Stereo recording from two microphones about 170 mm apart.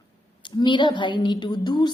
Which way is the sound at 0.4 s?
25° left (ahead or behind).